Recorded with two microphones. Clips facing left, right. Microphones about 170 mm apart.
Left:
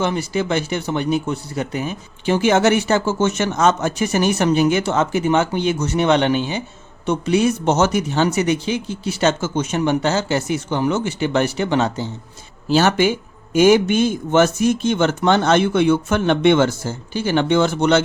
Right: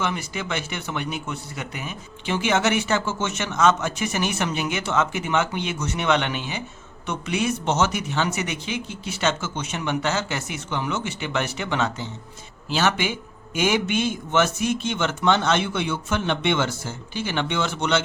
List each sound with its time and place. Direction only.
0.0 s speech: 35° left (ahead or behind)